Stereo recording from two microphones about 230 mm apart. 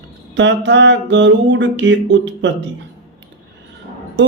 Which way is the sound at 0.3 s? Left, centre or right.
Right.